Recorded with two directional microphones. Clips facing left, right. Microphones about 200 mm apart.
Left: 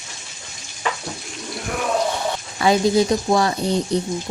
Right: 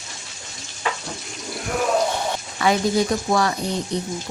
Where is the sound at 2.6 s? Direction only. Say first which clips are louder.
Left 3 dB; 25° left (ahead or behind).